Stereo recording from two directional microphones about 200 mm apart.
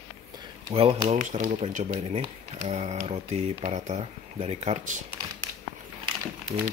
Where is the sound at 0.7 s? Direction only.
25° right (ahead or behind).